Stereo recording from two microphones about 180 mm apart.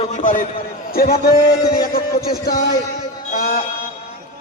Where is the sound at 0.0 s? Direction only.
45° left (ahead or behind).